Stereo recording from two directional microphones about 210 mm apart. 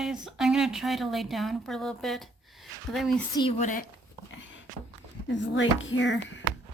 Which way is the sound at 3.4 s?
30° left (ahead or behind).